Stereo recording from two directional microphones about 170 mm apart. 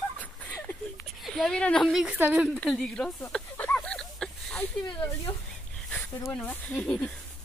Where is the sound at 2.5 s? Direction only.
Centre (ahead or behind).